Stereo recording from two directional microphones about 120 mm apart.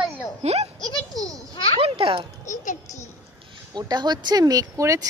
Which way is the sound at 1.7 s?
50° right (ahead or behind).